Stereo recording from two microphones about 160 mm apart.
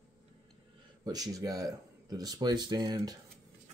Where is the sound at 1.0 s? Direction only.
25° right (ahead or behind).